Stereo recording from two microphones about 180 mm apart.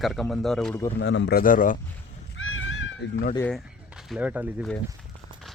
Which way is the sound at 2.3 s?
90° left.